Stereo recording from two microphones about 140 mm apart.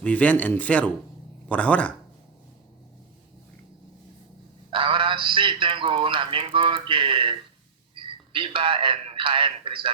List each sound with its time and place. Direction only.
0.0 s speech: 10° left (ahead or behind)
4.7 s a man's voice: 40° right (ahead or behind)